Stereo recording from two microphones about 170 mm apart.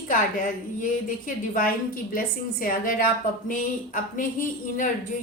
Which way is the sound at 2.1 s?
55° left (ahead or behind).